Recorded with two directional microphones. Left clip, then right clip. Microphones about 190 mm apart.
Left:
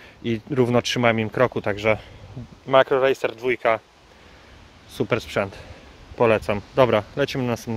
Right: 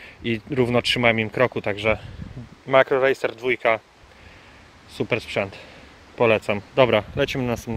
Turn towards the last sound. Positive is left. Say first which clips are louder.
# even
turn(degrees=0)  # may be behind; listen again after turning